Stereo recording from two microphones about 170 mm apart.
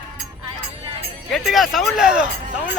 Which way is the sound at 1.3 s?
Centre (ahead or behind).